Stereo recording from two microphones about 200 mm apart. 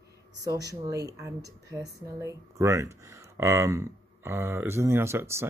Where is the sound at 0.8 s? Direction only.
15° right (ahead or behind).